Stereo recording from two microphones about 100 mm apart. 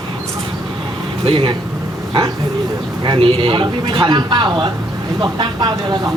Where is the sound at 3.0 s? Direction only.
60° right (ahead or behind).